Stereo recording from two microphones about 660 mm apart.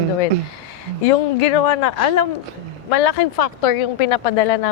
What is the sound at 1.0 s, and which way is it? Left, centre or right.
Speech, left.